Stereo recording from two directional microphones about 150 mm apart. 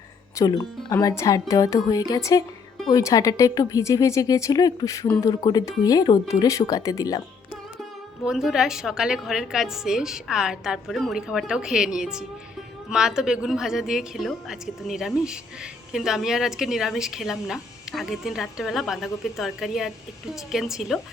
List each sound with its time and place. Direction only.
0.3 s a woman's voice: 25° left (ahead or behind)
8.2 s a woman's voice: 5° right (ahead or behind)